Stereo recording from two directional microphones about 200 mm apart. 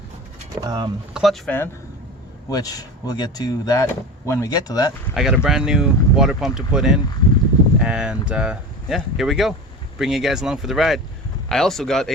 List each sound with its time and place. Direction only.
0.5 s speech: 20° right (ahead or behind)
1.1 s speech: centre (ahead or behind)
2.5 s speech: 20° left (ahead or behind)
5.1 s speech: 5° right (ahead or behind)